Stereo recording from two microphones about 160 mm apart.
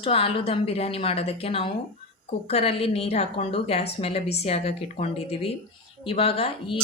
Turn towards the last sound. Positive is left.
turn(degrees=35)  # may be behind; listen again after turning